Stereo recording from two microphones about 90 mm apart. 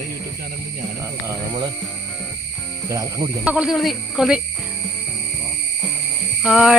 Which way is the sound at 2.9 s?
40° right (ahead or behind).